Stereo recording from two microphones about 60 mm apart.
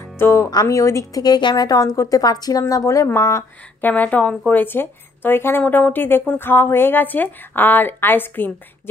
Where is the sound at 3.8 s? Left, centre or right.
Left.